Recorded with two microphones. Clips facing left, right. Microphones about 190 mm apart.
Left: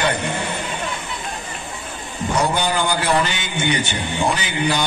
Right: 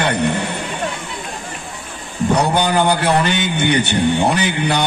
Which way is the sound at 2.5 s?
60° right (ahead or behind).